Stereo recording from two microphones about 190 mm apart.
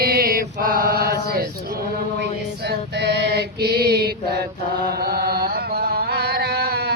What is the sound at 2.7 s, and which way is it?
Mantra, 60° right (ahead or behind).